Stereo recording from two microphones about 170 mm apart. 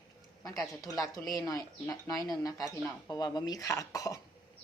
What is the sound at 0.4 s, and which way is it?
Speech, 20° left (ahead or behind).